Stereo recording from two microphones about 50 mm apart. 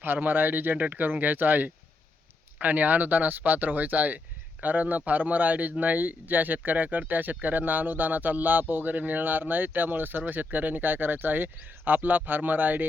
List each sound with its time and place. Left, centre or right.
0.0 s speech: right